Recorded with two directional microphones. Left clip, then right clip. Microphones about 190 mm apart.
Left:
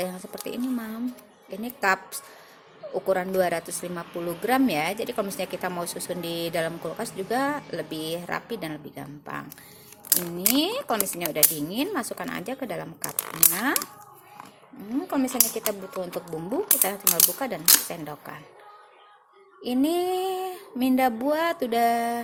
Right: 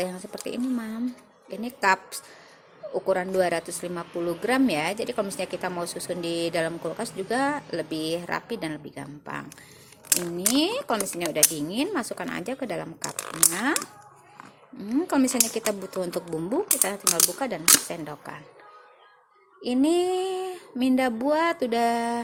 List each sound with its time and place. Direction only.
0.0 s speech: 10° right (ahead or behind)
10.5 s speech: 10° right (ahead or behind)
14.8 s speech: 25° right (ahead or behind)
16.2 s speech: 10° right (ahead or behind)
19.6 s speech: 10° right (ahead or behind)